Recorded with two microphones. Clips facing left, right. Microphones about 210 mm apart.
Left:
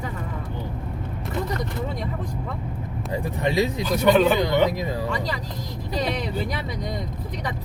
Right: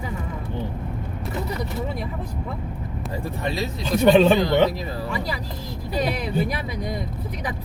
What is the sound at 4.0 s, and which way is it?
Speech, 25° right (ahead or behind).